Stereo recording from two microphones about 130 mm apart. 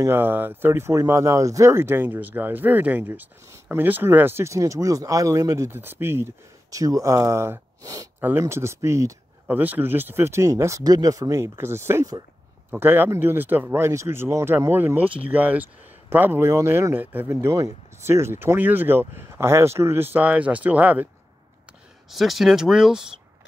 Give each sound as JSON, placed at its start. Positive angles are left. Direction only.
{"t": 0.0, "sound": "speech", "side_deg": -15}
{"t": 22.1, "sound": "speech", "side_deg": 0}